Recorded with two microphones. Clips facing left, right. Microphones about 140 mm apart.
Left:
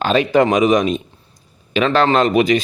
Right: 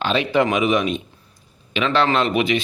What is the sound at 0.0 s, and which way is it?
Speech, 45° left (ahead or behind).